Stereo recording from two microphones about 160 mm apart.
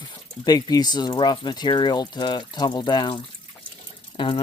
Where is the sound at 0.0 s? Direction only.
25° left (ahead or behind).